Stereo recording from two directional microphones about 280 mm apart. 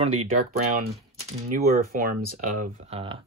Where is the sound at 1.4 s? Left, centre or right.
Right.